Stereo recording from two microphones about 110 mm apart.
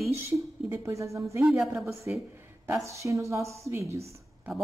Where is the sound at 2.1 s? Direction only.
15° right (ahead or behind).